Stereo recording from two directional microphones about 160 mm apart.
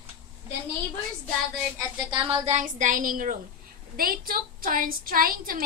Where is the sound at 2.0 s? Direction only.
35° right (ahead or behind).